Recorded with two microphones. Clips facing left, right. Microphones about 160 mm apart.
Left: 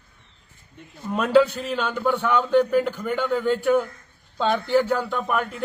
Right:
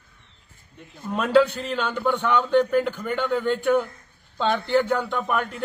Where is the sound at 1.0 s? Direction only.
Centre (ahead or behind).